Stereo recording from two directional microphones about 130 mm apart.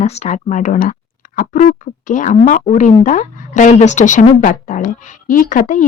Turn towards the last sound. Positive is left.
turn(degrees=75)  # may be behind; listen again after turning